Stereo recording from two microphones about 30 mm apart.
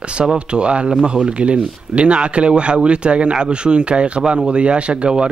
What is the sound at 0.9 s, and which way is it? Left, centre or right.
Speech, right.